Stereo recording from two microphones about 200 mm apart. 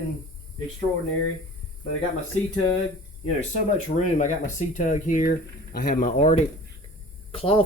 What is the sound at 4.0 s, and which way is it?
Speech, 40° left (ahead or behind).